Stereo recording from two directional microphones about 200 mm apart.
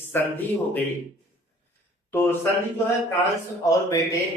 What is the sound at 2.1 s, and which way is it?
Speech, 10° left (ahead or behind).